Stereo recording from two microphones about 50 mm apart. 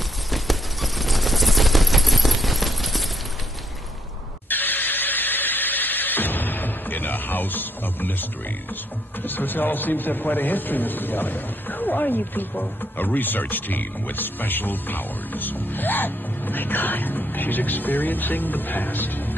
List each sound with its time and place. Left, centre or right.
0.3 s a sound: centre
4.5 s squeal: left
9.2 s a man's voice: left